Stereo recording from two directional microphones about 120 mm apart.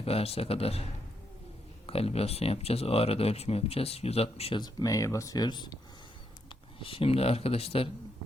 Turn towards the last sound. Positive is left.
turn(degrees=55)  # may be behind; listen again after turning